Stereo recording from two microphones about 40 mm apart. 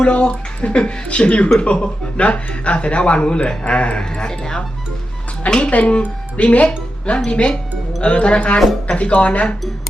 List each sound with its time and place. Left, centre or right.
0.0 s speech: left
4.1 s speech: centre
5.7 s speech: left